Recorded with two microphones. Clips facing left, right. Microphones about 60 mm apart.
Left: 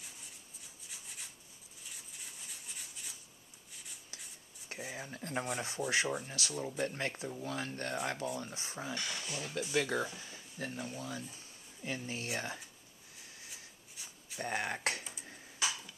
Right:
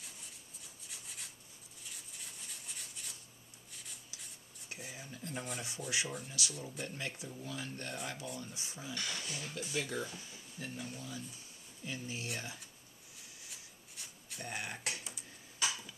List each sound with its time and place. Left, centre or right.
0.8 s rub: centre
2.4 s rub: centre
4.6 s speech: left
5.9 s speech: left
9.0 s speech: centre
9.6 s speech: left
10.3 s speech: left
14.0 s writing: centre
14.4 s speech: left